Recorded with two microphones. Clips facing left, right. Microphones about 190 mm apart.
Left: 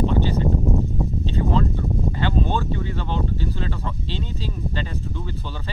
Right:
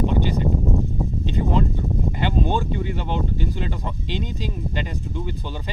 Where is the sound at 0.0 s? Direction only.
15° right (ahead or behind).